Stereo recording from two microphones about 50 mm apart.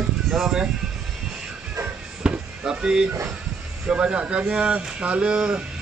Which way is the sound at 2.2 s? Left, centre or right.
Centre.